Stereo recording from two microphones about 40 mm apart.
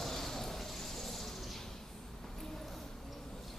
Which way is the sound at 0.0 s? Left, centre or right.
Centre.